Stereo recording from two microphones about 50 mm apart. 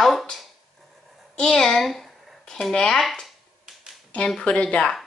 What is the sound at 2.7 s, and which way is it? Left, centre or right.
Speech, centre.